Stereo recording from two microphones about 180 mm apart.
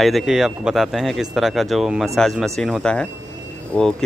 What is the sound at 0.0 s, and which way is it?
Speech, centre (ahead or behind).